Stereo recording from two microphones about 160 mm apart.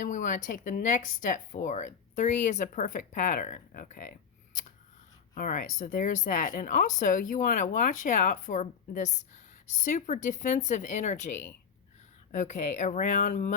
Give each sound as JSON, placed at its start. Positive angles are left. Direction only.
{"t": 0.0, "sound": "speech", "side_deg": 55}